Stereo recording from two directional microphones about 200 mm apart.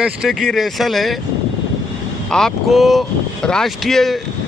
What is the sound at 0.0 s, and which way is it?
Speech, centre (ahead or behind).